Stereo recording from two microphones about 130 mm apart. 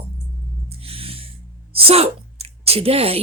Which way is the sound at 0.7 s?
45° right (ahead or behind).